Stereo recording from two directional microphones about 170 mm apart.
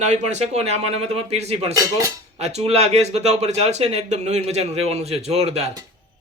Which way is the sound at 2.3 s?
40° right (ahead or behind).